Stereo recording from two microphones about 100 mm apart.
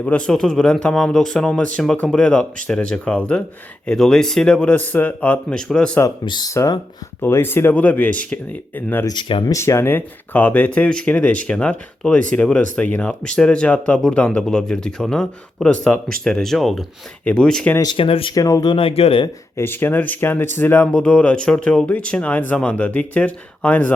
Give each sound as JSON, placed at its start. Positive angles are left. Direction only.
{"t": 0.0, "sound": "speech", "side_deg": 10}
{"t": 6.2, "sound": "speech", "side_deg": 45}
{"t": 6.5, "sound": "speech", "side_deg": 30}
{"t": 9.0, "sound": "speech", "side_deg": 55}
{"t": 9.4, "sound": "speech", "side_deg": 30}
{"t": 17.9, "sound": "speech", "side_deg": 65}
{"t": 18.3, "sound": "speech", "side_deg": 35}
{"t": 18.7, "sound": "speech", "side_deg": 70}
{"t": 19.5, "sound": "speech", "side_deg": 20}
{"t": 20.8, "sound": "speech", "side_deg": 10}